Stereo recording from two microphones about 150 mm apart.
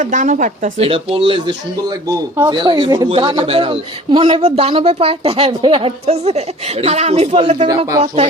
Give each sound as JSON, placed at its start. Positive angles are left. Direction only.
{"t": 0.0, "sound": "speech", "side_deg": -60}
{"t": 0.8, "sound": "speech", "side_deg": -40}
{"t": 2.0, "sound": "speech", "side_deg": -25}